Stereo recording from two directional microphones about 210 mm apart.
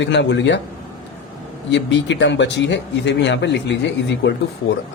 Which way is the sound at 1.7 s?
60° left (ahead or behind).